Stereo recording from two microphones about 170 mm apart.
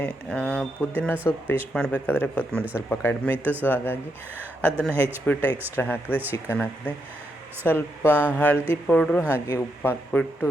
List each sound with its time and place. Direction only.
0.0 s speech: 5° left (ahead or behind)
3.3 s speech: 10° right (ahead or behind)
3.6 s speech: 10° left (ahead or behind)
8.1 s speech: 10° right (ahead or behind)
8.4 s speech: 10° left (ahead or behind)
9.5 s speech: 20° left (ahead or behind)
10.1 s speech: 10° left (ahead or behind)